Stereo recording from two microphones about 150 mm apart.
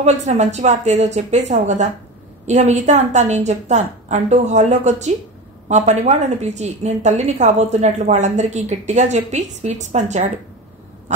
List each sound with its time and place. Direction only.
0.0 s a woman's voice: 50° right (ahead or behind)